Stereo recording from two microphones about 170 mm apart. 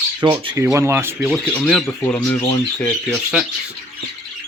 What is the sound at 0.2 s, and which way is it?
Speech, 20° right (ahead or behind).